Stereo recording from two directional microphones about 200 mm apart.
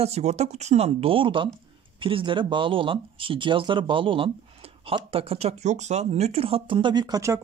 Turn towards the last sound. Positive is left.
turn(degrees=-15)  # may be behind; listen again after turning